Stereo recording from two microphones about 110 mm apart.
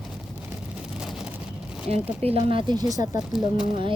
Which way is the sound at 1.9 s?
65° right (ahead or behind).